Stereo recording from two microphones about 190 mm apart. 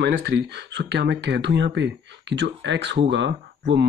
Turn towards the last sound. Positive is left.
turn(degrees=-70)  # may be behind; listen again after turning